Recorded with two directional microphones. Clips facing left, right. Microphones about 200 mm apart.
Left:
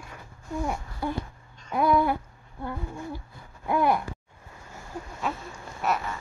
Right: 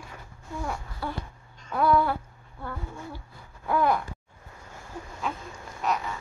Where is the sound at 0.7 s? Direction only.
20° left (ahead or behind).